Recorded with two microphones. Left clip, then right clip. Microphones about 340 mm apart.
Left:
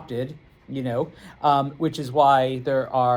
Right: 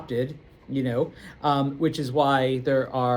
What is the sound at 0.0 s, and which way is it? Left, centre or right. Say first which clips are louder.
Speech: right 2 dB; centre.